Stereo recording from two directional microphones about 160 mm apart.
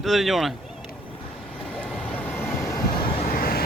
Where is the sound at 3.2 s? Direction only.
65° left (ahead or behind).